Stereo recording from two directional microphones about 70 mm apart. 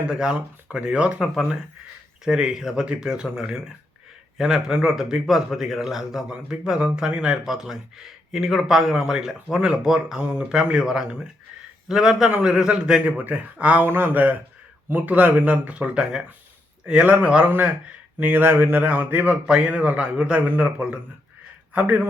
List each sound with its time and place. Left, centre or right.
0.1 s a man's voice: centre
13.8 s a man's voice: right
19.5 s a man's voice: centre